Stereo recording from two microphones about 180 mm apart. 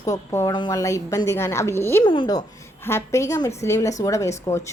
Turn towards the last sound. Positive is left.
turn(degrees=15)  # may be behind; listen again after turning